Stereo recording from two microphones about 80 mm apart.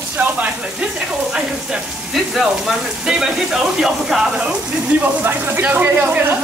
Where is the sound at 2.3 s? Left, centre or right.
Centre.